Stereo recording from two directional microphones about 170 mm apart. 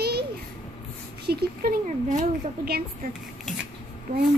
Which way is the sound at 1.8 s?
45° right (ahead or behind).